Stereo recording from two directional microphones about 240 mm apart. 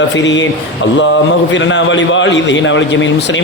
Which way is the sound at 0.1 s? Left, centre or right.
Left.